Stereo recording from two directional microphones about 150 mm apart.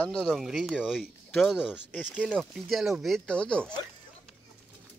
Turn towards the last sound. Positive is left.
turn(degrees=5)  # may be behind; listen again after turning